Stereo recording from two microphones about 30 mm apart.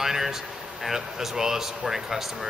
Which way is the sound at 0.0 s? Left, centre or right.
Centre.